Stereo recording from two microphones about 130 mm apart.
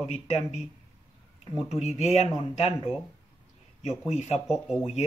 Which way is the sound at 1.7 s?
60° left (ahead or behind).